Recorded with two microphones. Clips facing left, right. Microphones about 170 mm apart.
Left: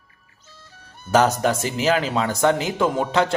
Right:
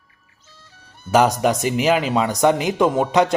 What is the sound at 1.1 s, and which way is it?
Speech, 10° right (ahead or behind).